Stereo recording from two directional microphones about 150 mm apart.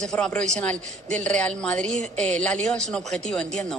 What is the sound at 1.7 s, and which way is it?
Speech, 50° right (ahead or behind).